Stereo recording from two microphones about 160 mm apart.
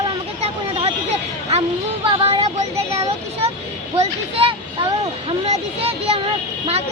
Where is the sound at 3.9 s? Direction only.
40° right (ahead or behind).